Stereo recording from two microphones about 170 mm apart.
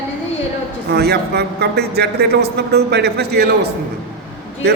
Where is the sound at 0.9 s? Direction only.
70° right (ahead or behind).